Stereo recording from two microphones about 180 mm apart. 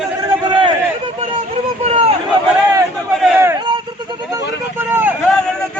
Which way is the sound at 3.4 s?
15° right (ahead or behind).